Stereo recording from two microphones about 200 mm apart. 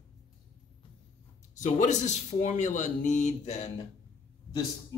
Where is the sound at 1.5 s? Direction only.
40° left (ahead or behind).